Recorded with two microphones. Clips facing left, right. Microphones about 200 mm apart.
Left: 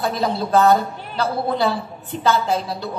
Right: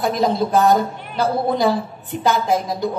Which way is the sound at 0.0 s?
15° right (ahead or behind).